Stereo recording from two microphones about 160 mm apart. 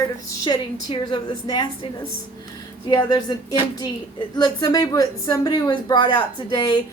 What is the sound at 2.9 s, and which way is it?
Speech, 25° left (ahead or behind).